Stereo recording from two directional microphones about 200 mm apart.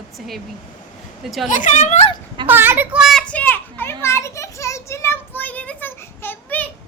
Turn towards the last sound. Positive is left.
turn(degrees=10)  # may be behind; listen again after turning